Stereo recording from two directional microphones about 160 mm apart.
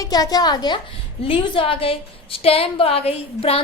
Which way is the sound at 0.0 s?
25° left (ahead or behind).